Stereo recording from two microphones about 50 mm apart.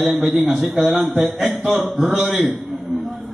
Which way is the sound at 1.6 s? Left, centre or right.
Right.